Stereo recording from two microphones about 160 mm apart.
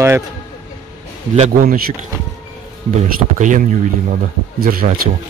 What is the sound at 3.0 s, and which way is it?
Speech, 50° right (ahead or behind).